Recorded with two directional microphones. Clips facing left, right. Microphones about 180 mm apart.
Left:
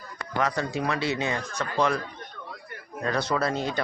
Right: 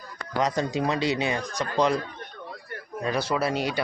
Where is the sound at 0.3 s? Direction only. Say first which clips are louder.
Right 2 dB; 20° right (ahead or behind).